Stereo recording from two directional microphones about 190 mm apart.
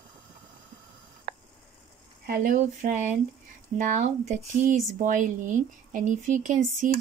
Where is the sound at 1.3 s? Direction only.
45° right (ahead or behind).